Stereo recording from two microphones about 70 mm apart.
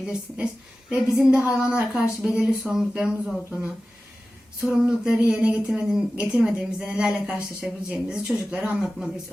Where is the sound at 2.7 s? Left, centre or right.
Centre.